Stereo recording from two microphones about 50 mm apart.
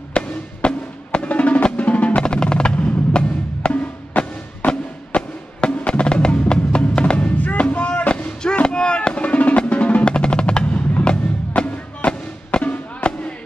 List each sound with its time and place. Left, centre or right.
0.1 s music: centre
4.1 s music: left
7.4 s fireworks: left
9.6 s percussion: left
11.1 s music: left
12.5 s fireworks: left